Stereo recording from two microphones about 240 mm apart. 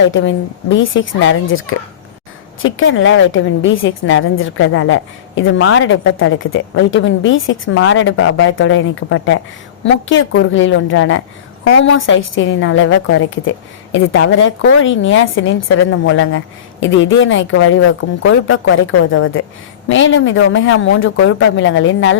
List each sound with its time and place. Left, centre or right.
0.1 s a woman's voice: left